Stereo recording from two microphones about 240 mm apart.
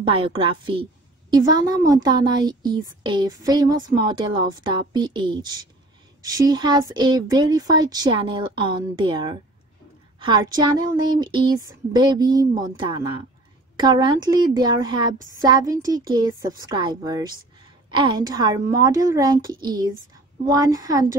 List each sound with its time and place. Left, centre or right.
0.0 s a woman's voice: right